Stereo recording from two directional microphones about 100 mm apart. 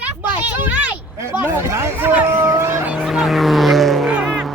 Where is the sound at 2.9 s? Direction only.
Centre (ahead or behind).